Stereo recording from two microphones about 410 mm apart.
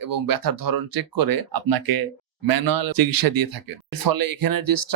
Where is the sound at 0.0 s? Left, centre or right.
Right.